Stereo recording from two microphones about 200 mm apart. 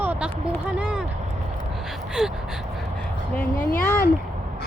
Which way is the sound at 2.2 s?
Centre (ahead or behind).